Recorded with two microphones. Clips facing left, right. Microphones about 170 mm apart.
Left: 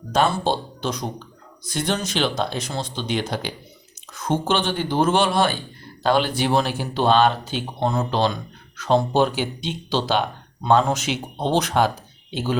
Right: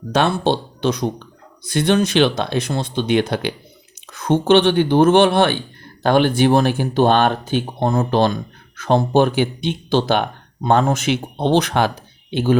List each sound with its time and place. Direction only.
0.1 s speech: 70° right (ahead or behind)